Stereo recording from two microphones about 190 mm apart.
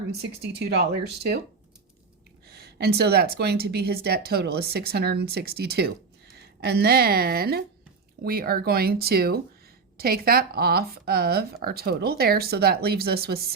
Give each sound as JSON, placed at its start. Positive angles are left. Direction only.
{"t": 0.6, "sound": "speech", "side_deg": -60}
{"t": 2.5, "sound": "speech", "side_deg": -60}